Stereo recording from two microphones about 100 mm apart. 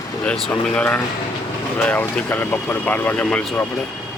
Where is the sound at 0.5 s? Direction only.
15° left (ahead or behind).